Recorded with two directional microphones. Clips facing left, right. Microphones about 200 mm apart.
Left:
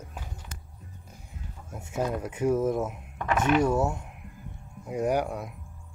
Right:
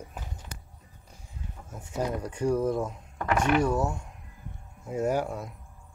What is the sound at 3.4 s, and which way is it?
Speech, 20° left (ahead or behind).